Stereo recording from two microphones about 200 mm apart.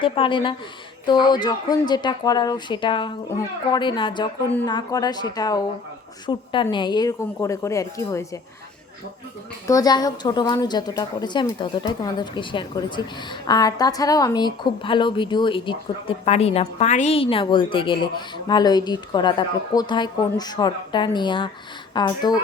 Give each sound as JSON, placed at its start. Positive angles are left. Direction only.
{"t": 0.0, "sound": "a woman's voice", "side_deg": 25}
{"t": 9.6, "sound": "a woman's voice", "side_deg": 20}